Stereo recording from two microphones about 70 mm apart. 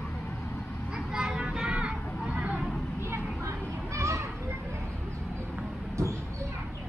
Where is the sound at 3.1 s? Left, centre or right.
Right.